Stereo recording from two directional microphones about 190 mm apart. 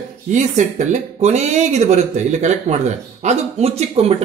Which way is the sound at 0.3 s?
40° right (ahead or behind).